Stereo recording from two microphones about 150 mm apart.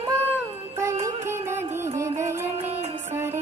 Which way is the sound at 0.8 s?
20° right (ahead or behind).